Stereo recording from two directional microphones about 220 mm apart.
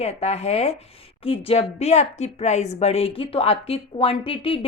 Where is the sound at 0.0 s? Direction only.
30° left (ahead or behind).